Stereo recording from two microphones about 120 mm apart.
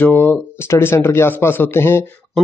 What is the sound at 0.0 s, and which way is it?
Speech, 15° left (ahead or behind).